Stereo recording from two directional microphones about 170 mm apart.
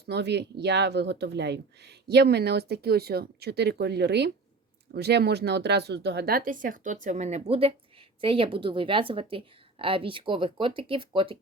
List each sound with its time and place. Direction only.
0.0 s a woman's voice: 80° right; by 11.3 s 30° right (ahead or behind)